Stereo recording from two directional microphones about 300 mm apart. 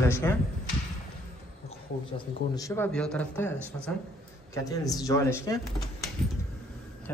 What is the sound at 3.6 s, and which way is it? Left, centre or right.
Speech, centre.